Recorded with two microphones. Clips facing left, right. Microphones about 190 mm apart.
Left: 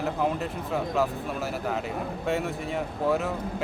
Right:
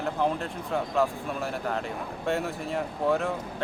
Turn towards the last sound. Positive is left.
turn(degrees=0)  # may be behind; listen again after turning